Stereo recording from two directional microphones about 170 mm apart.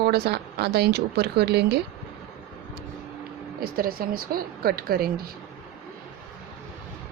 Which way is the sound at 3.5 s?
60° right (ahead or behind).